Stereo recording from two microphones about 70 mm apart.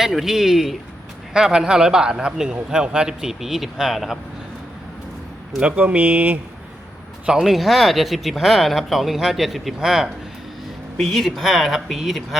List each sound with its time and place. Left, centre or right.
0.0 s speech: centre
5.5 s speech: centre
7.4 s speech: centre